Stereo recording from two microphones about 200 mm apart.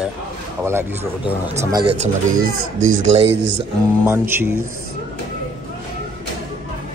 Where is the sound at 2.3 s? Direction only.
90° right.